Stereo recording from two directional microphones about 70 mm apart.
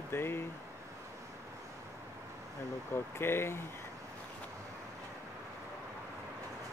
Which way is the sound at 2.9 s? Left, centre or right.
Left.